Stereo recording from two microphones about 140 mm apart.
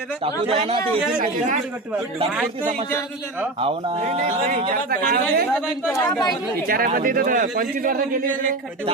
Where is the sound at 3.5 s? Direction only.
45° right (ahead or behind).